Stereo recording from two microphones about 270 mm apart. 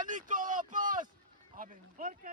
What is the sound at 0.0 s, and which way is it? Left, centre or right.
A man's voice, right.